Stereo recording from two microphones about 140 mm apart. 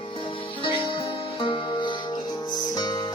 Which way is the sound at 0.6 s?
40° left (ahead or behind).